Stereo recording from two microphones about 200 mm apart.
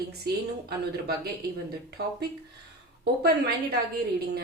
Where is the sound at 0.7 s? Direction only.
50° right (ahead or behind).